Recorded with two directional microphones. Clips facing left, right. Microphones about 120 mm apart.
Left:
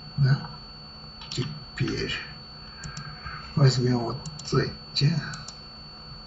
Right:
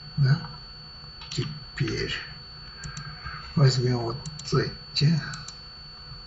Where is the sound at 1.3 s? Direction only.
Centre (ahead or behind).